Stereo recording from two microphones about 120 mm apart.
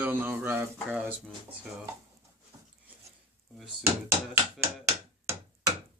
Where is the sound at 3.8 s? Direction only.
20° right (ahead or behind).